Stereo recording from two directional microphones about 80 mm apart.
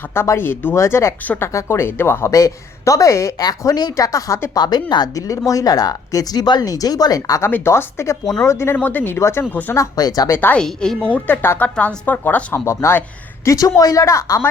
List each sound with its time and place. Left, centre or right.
0.1 s speech: left
2.3 s speech: left
3.6 s speech: left
4.5 s speech: left
5.5 s speech: left
7.4 s speech: left
9.7 s speech: left
10.2 s speech: left
10.5 s a woman's voice: centre
11.3 s speech: left
12.5 s speech: left